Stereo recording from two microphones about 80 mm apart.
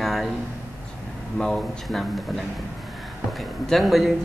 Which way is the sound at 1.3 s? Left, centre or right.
Centre.